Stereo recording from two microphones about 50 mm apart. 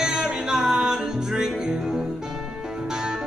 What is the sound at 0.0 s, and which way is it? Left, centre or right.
Music, centre.